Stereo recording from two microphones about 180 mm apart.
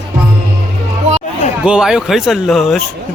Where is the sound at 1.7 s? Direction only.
5° right (ahead or behind).